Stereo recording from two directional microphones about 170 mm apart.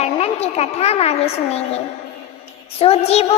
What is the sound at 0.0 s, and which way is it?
A woman's voice, 40° left (ahead or behind).